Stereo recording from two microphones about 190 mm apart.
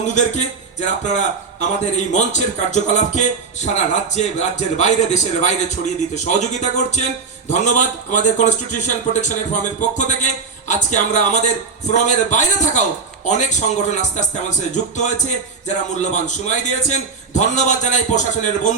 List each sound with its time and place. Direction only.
0.1 s a man's voice: 40° left (ahead or behind)